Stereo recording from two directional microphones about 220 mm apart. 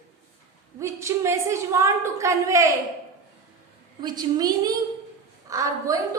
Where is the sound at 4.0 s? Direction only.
20° right (ahead or behind).